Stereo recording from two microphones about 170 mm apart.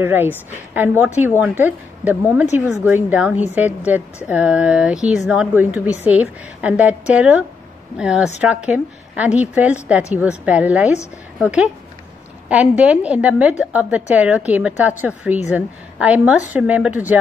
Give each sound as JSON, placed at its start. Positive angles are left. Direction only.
{"t": 0.0, "sound": "a woman's voice", "side_deg": -15}